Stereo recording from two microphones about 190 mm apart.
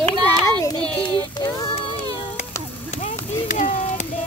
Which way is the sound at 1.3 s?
20° left (ahead or behind).